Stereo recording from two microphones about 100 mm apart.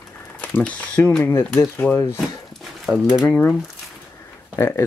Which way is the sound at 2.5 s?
Centre (ahead or behind).